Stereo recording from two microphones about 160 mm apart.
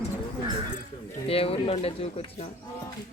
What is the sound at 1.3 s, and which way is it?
Speech, 35° left (ahead or behind).